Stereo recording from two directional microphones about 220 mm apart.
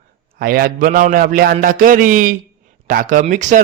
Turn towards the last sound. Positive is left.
turn(degrees=-35)  # may be behind; listen again after turning